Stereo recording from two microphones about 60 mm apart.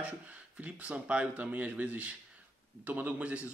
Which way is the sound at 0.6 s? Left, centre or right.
Right.